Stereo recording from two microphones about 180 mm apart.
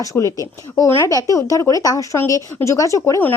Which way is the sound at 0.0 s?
15° left (ahead or behind).